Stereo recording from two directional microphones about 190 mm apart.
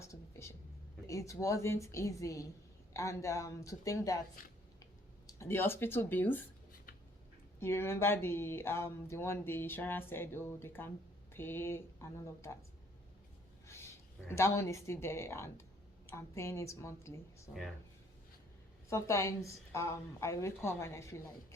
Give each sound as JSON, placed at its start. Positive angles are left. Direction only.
{"t": 0.0, "sound": "whispering", "side_deg": 15}
{"t": 1.0, "sound": "speech", "side_deg": 15}
{"t": 5.4, "sound": "speech", "side_deg": 15}
{"t": 7.6, "sound": "speech", "side_deg": 15}
{"t": 13.7, "sound": "a woman's voice", "side_deg": 15}
{"t": 18.9, "sound": "speech", "side_deg": 15}